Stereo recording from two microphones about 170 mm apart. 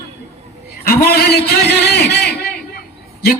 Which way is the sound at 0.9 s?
65° left (ahead or behind).